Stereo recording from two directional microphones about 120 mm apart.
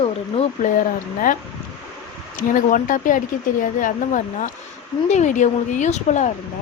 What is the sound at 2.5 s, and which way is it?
Speech, 90° left.